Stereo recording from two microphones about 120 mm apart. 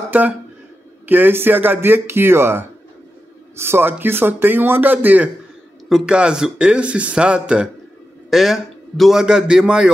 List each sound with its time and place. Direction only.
0.1 s a man's voice: 15° right (ahead or behind)